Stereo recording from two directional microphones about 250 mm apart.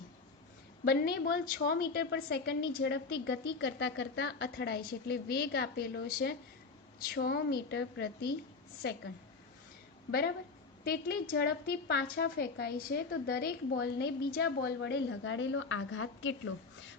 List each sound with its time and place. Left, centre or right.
0.9 s a woman's voice: left
10.1 s a woman's voice: left